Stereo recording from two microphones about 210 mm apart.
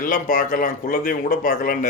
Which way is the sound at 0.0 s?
40° left (ahead or behind).